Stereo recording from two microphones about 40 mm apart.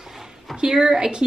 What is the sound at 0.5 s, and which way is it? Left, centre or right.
Speech, centre.